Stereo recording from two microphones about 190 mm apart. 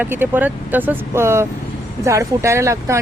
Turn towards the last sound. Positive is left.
turn(degrees=-15)  # may be behind; listen again after turning